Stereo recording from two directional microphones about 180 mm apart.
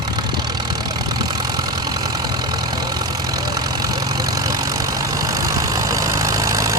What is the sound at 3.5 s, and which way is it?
Vehicle, 20° right (ahead or behind).